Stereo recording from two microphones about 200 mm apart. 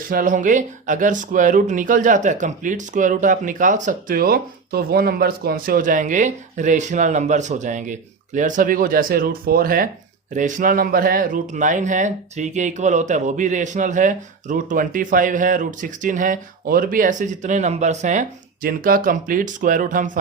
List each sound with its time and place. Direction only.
0.1 s speech: 45° right (ahead or behind)